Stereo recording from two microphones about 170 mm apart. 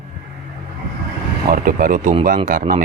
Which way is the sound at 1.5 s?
55° right (ahead or behind).